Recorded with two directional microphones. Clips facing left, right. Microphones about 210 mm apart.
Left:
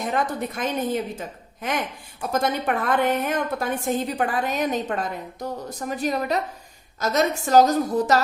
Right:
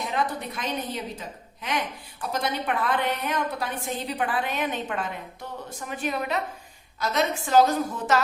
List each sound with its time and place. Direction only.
0.0 s a woman's voice: 45° left (ahead or behind)